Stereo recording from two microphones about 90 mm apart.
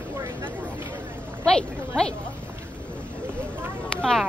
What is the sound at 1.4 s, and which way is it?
Speech, 10° left (ahead or behind).